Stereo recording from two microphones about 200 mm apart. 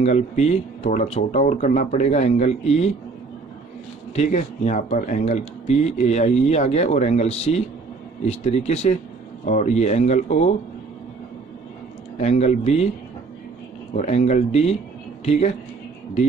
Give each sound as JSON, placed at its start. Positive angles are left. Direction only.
{"t": 0.0, "sound": "speech", "side_deg": 35}
{"t": 4.1, "sound": "speech", "side_deg": 35}
{"t": 12.2, "sound": "speech", "side_deg": 35}
{"t": 13.9, "sound": "speech", "side_deg": 35}